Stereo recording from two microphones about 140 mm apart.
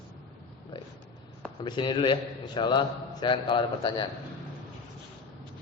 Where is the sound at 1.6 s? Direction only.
35° left (ahead or behind).